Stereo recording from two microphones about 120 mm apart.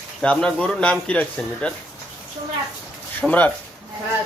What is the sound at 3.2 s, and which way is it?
Speech, 10° left (ahead or behind).